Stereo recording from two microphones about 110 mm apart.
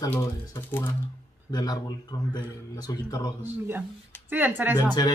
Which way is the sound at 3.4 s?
15° right (ahead or behind).